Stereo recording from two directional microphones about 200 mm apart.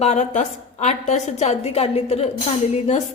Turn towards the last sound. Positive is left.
turn(degrees=35)  # may be behind; listen again after turning